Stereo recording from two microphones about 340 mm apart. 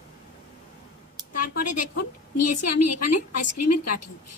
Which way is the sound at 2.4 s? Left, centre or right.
Left.